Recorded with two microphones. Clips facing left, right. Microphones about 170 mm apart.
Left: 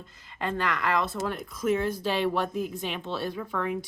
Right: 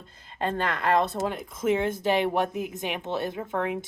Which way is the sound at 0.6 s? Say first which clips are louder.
Right 3 dB; 25° right (ahead or behind).